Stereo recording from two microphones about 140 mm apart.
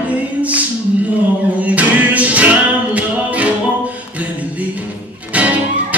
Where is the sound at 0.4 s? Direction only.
10° right (ahead or behind).